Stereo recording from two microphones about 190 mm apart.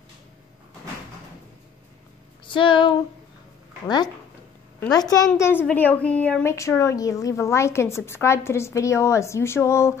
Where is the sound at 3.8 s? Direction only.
20° left (ahead or behind).